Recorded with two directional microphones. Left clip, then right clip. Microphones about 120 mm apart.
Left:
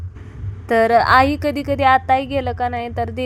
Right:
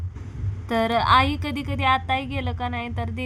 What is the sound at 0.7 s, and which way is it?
A woman's voice, 45° left (ahead or behind).